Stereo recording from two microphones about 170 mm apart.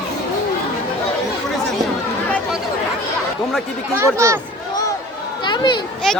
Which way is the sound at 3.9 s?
15° right (ahead or behind).